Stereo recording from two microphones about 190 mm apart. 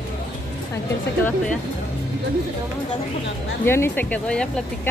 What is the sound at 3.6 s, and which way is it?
Speech, 10° left (ahead or behind).